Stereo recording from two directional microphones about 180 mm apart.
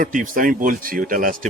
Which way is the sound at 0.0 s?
45° right (ahead or behind).